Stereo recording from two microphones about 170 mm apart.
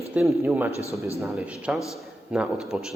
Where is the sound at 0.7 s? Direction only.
15° left (ahead or behind).